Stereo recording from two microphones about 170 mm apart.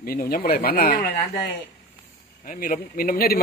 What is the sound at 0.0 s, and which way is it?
Speech, 60° left (ahead or behind).